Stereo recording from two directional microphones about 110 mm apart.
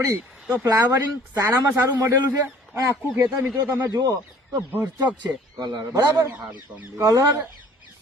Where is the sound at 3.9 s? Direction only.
35° right (ahead or behind).